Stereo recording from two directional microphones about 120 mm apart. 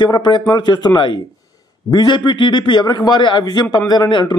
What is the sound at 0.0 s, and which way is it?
A man's voice, 40° left (ahead or behind).